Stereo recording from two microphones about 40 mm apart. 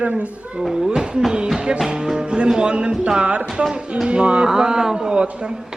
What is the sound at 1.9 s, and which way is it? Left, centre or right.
Music, centre.